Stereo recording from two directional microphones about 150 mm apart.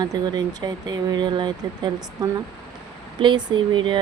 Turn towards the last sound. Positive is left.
turn(degrees=-30)  # may be behind; listen again after turning